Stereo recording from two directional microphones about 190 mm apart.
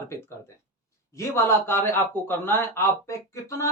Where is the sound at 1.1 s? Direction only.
15° left (ahead or behind).